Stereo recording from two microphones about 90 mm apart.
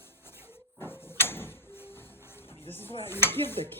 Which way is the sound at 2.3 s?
25° left (ahead or behind).